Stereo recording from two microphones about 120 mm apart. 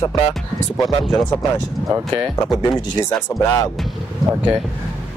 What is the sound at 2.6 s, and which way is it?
Speech, 30° left (ahead or behind).